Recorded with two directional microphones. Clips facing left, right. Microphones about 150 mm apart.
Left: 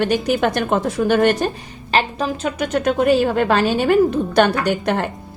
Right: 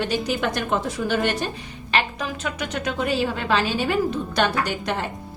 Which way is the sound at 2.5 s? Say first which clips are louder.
Left 10 dB; 50° left (ahead or behind).